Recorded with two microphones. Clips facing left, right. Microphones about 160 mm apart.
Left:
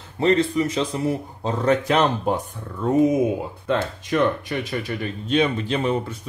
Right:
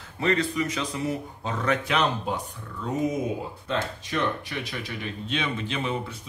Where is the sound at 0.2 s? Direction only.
30° left (ahead or behind).